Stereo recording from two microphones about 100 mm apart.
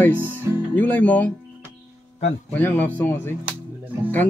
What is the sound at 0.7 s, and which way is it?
Speech, 15° left (ahead or behind).